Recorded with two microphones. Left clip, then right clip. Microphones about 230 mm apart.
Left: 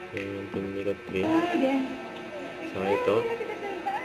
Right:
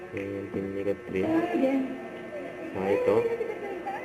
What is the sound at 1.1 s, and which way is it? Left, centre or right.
Music, centre.